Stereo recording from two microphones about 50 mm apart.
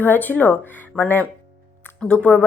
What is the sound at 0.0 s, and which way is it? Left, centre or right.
A woman's voice, left.